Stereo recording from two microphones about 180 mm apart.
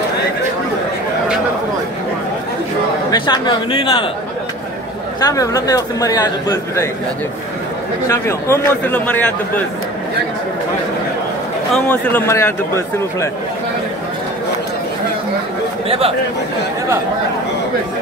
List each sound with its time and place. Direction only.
3.1 s speech: 25° left (ahead or behind)
5.2 s speech: 20° left (ahead or behind)
8.1 s a man's voice: 15° left (ahead or behind)
11.7 s a man's voice: 10° left (ahead or behind)